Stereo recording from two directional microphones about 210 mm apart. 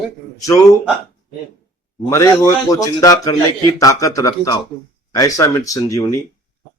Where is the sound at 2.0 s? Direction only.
15° left (ahead or behind).